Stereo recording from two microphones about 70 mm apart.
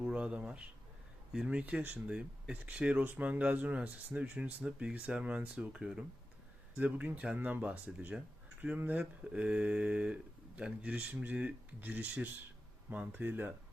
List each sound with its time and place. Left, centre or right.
0.0 s a sound: centre
1.5 s speech: centre
6.7 s speech: right